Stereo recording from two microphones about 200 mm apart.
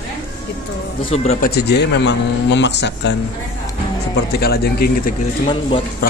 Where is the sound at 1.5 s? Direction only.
55° left (ahead or behind).